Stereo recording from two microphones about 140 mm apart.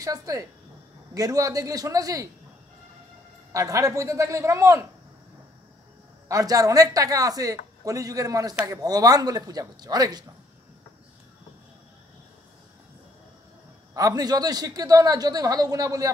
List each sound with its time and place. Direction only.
0.0 s speech: 25° right (ahead or behind)
3.5 s speech: 25° right (ahead or behind)
6.2 s speech: 25° right (ahead or behind)
13.9 s speech: 25° right (ahead or behind)